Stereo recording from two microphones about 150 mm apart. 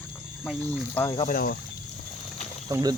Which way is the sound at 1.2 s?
80° left.